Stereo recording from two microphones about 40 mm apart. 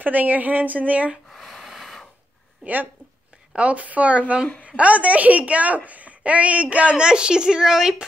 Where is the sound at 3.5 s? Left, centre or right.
Right; by 8.1 s centre.